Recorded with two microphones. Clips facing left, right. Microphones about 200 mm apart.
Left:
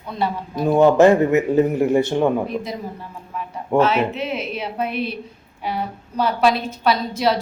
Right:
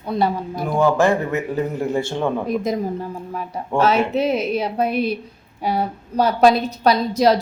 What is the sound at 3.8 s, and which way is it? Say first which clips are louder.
A woman's voice: right 6 dB; 40° right (ahead or behind).